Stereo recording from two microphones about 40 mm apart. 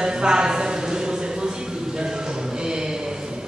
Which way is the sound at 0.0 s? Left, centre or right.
Centre.